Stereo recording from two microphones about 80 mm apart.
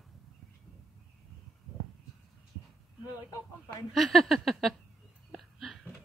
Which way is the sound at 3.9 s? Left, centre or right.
Centre.